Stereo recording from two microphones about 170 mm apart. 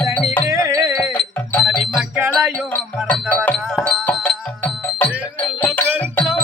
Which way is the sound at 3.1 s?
10° left (ahead or behind).